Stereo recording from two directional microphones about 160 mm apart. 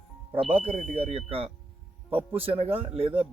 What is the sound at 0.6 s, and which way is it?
Speech, 40° right (ahead or behind).